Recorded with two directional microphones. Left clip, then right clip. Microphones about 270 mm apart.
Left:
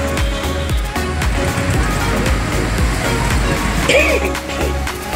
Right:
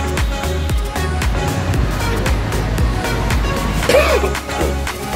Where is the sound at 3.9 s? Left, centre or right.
Right.